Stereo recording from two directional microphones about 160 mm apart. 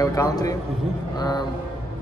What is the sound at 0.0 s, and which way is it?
A man's voice, 20° left (ahead or behind).